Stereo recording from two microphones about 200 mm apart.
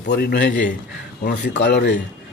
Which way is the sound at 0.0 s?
55° left (ahead or behind).